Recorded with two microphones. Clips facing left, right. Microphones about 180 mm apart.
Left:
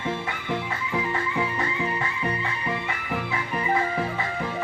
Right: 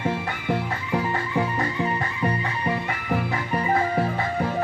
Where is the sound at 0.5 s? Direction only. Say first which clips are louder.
Right 3 dB; 45° right (ahead or behind).